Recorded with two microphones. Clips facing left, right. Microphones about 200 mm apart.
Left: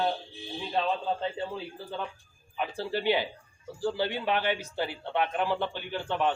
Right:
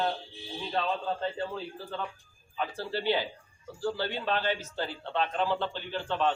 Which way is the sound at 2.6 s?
15° left (ahead or behind).